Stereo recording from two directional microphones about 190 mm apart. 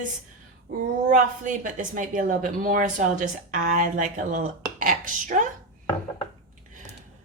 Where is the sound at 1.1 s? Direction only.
40° right (ahead or behind).